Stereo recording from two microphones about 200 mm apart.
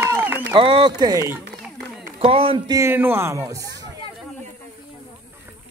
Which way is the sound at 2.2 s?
30° right (ahead or behind).